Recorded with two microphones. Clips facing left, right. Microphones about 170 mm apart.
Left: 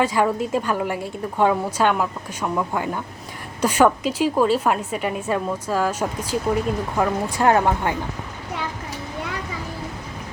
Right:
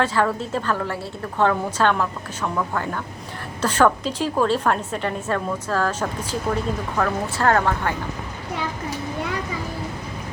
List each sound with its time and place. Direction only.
0.0 s a woman's voice: 15° left (ahead or behind)